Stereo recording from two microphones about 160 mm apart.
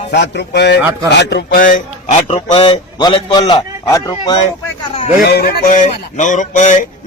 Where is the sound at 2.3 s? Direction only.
35° left (ahead or behind).